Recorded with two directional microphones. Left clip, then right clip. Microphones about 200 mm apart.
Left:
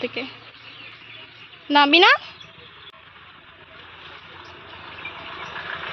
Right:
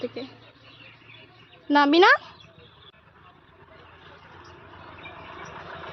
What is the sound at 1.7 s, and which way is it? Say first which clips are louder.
Speech: left 3 dB; 15° right (ahead or behind).